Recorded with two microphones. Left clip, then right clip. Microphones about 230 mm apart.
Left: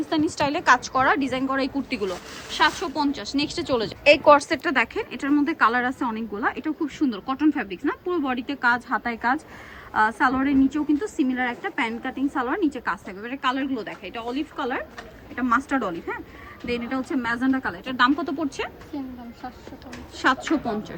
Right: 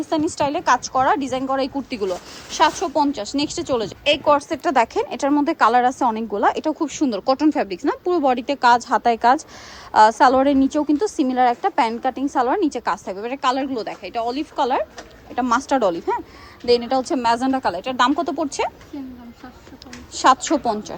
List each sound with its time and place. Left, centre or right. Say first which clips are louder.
0.1 s a woman's voice: right 3 dB; centre
4.0 s a woman's voice: left 3 dB; centre
20.1 s a woman's voice: right 6 dB; centre